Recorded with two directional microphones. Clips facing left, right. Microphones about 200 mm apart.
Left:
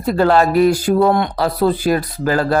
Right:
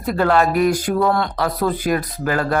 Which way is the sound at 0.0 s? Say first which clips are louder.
Left 3 dB; 30° left (ahead or behind).